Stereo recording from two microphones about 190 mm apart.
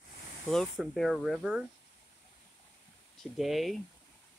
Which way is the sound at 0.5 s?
Centre (ahead or behind).